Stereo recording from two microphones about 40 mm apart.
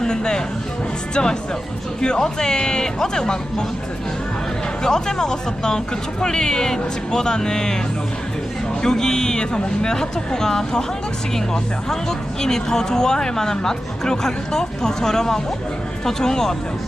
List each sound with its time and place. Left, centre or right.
0.0 s music: centre
1.1 s speech: centre
4.8 s speech: centre
8.8 s speech: centre